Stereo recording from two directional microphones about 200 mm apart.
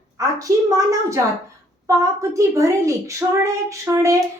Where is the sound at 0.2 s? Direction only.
15° right (ahead or behind).